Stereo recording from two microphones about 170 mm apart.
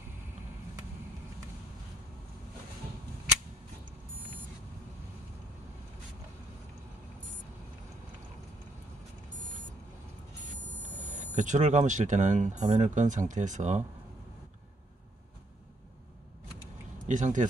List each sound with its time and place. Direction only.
11.0 s speech: 45° right (ahead or behind)
17.0 s speech: 50° right (ahead or behind)